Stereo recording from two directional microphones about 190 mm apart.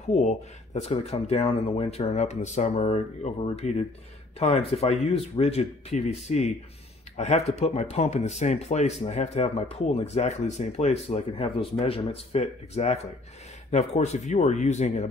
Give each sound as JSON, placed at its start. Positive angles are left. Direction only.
{"t": 0.1, "sound": "speech", "side_deg": 40}